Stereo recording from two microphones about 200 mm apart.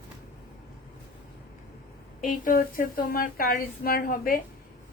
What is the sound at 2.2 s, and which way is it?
A woman's voice, 45° left (ahead or behind).